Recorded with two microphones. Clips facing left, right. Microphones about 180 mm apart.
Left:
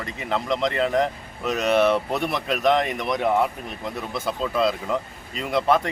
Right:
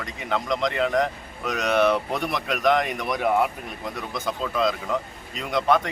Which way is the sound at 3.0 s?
20° left (ahead or behind).